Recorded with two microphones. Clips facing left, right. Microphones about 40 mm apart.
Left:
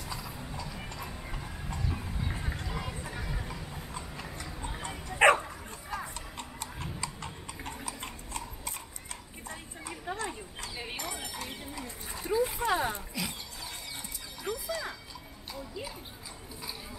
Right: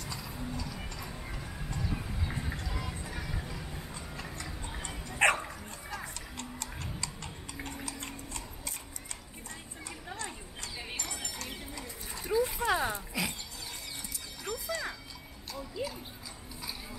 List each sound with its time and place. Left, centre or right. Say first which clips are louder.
0.0 s clip-clop: even; centre
3.1 s music: left 1 dB; centre
3.9 s dog: left 1 dB; centre
5.9 s music: left 4 dB; centre
7.0 s tick-tock: left 2 dB; centre
7.6 s a sound: left 1 dB; centre
14.4 s music: left 1 dB; centre
15.5 s a sound: right 3 dB; centre